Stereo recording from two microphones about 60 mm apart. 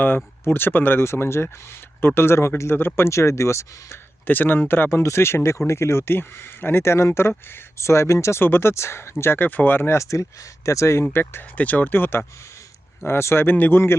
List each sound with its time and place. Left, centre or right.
0.4 s speech: left
1.0 s speech: left
4.3 s speech: left
8.4 s speech: left
10.0 s speech: left
11.0 s speech: left
11.5 s speech: left